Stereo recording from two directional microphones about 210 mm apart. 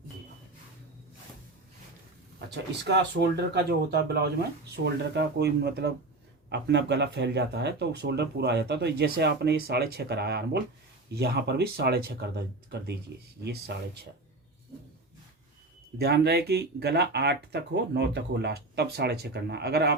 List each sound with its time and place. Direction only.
2.8 s speech: 55° right (ahead or behind)
16.0 s speech: 50° right (ahead or behind)